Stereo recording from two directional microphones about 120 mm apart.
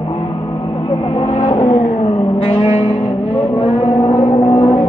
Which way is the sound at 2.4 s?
70° left (ahead or behind).